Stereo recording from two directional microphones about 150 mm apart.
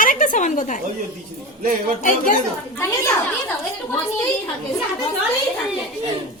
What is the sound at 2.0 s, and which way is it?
Speech, 60° left (ahead or behind).